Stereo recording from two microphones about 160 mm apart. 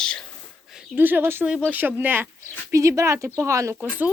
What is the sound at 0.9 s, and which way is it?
Speech, 10° right (ahead or behind).